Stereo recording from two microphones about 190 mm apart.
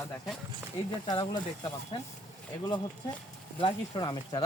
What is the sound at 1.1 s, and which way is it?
Speech, 20° left (ahead or behind).